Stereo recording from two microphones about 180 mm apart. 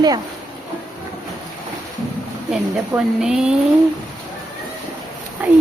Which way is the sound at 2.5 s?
5° right (ahead or behind).